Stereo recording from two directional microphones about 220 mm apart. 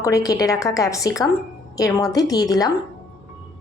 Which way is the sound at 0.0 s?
15° left (ahead or behind).